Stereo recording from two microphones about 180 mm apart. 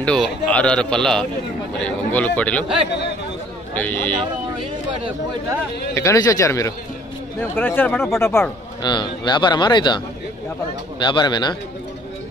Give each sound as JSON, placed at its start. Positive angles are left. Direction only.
{"t": 0.0, "sound": "a man's voice", "side_deg": 5}
{"t": 3.7, "sound": "speech", "side_deg": 10}
{"t": 5.9, "sound": "speech", "side_deg": 20}
{"t": 8.8, "sound": "a man's voice", "side_deg": 25}